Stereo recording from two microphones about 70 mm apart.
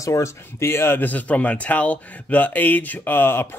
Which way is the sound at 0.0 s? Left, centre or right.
Left.